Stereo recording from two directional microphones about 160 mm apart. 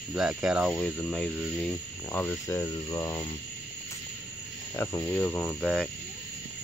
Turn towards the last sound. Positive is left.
turn(degrees=0)  # may be behind; listen again after turning